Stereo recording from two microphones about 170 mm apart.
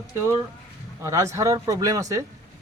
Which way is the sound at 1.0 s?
15° right (ahead or behind).